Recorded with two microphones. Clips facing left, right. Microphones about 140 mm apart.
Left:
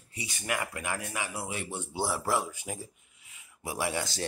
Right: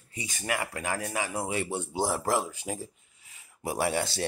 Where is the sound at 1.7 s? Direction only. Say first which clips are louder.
Right 3 dB; 45° right (ahead or behind).